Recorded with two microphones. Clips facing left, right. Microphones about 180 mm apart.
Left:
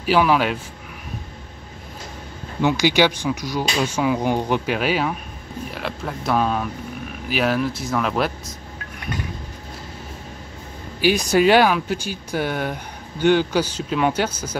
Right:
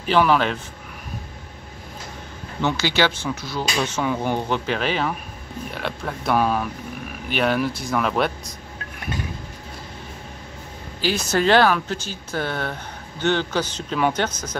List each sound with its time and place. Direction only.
0.0 s speech: 5° left (ahead or behind)
2.6 s speech: 15° left (ahead or behind)
11.0 s speech: 15° left (ahead or behind)